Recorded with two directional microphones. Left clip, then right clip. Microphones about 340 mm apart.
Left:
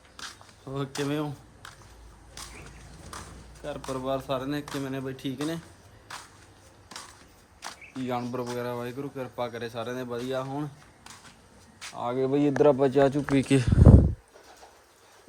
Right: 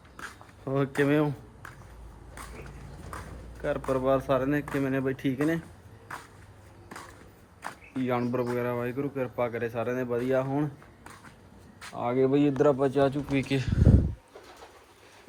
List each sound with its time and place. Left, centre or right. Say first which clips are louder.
0.2 s a sound: even; centre
3.6 s speech: right 6 dB; centre
7.6 s speech: right 3 dB; centre
11.8 s speech: right 2 dB; centre; by 13.7 s left